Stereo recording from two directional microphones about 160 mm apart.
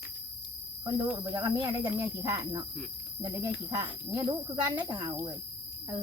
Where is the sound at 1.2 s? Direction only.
20° right (ahead or behind).